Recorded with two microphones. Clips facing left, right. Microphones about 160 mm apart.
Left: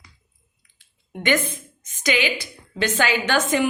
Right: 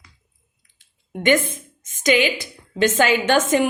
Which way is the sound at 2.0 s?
45° right (ahead or behind).